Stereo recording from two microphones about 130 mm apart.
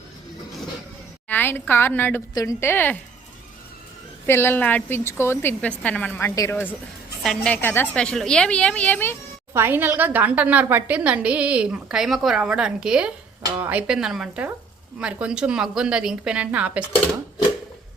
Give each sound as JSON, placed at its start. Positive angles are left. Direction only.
{"t": 1.3, "sound": "a woman's voice", "side_deg": 15}
{"t": 2.3, "sound": "a woman's voice", "side_deg": 25}
{"t": 4.3, "sound": "a woman's voice", "side_deg": 15}
{"t": 7.2, "sound": "a woman's voice", "side_deg": 0}
{"t": 7.5, "sound": "a woman's voice", "side_deg": 15}
{"t": 9.5, "sound": "a woman's voice", "side_deg": -15}